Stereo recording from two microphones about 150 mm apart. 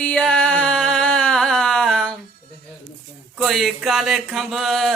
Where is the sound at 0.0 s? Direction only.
5° left (ahead or behind).